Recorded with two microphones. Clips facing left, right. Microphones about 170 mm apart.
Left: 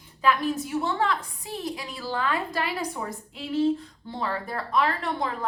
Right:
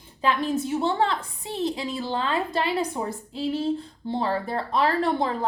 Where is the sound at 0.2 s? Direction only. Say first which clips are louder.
Even; 25° right (ahead or behind).